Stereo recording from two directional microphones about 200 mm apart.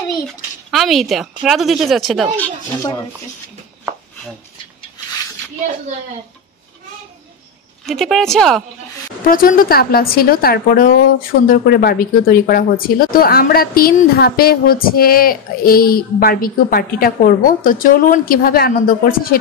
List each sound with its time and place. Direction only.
0.3 s a woman's voice: centre (ahead or behind)
2.3 s speech: 15° left (ahead or behind)
7.8 s a woman's voice: centre (ahead or behind)
9.3 s a woman's voice: 45° left (ahead or behind)